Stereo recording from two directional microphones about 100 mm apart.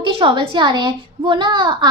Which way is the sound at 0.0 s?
55° right (ahead or behind).